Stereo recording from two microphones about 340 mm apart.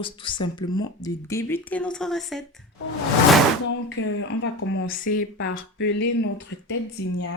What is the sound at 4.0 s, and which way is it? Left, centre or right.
Speech, left.